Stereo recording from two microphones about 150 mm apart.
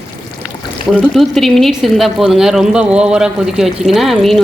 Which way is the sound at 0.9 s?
Centre (ahead or behind).